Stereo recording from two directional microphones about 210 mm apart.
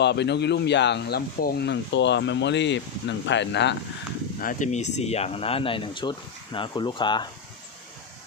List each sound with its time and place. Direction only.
0.0 s speech: 55° left (ahead or behind)
4.4 s speech: 40° left (ahead or behind); by 7.3 s 20° left (ahead or behind)